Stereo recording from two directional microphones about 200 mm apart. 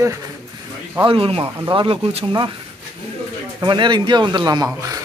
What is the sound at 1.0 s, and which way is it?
Speech, 25° right (ahead or behind).